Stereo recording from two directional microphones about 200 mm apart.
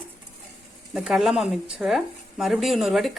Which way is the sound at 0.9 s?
Centre (ahead or behind).